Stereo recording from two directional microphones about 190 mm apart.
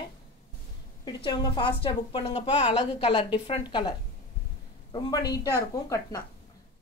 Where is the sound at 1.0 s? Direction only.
25° left (ahead or behind).